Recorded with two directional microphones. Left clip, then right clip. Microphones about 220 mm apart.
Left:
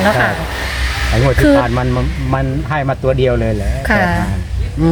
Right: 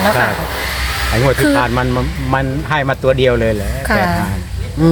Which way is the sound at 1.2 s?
5° right (ahead or behind).